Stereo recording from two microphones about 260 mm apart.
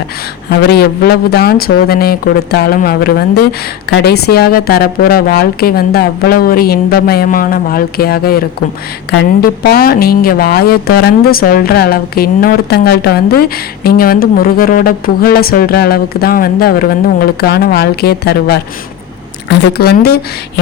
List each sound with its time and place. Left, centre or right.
0.6 s a woman's voice: left